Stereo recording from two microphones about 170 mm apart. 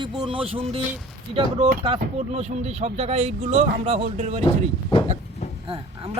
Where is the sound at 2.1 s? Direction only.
40° right (ahead or behind).